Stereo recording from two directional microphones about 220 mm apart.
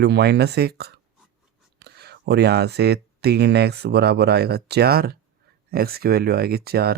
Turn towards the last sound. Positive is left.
turn(degrees=-45)  # may be behind; listen again after turning